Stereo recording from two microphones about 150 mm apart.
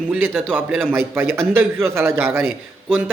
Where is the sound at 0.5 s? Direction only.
15° right (ahead or behind).